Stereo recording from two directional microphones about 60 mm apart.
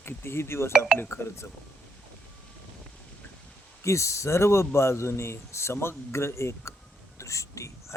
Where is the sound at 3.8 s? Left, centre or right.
Left.